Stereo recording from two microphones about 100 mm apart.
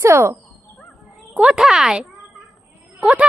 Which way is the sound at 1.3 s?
10° right (ahead or behind).